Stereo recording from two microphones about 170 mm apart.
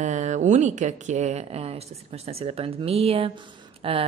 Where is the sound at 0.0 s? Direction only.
45° right (ahead or behind).